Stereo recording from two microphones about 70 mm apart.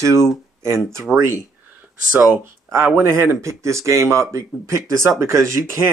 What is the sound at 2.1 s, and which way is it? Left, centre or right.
Speech, right.